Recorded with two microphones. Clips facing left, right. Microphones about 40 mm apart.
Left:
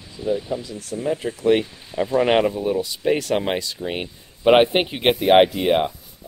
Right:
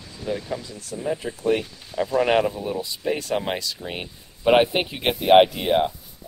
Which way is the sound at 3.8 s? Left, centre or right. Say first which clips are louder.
Left 5 dB; centre.